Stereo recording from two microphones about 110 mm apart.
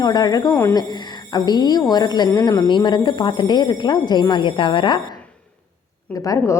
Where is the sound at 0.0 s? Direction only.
35° left (ahead or behind).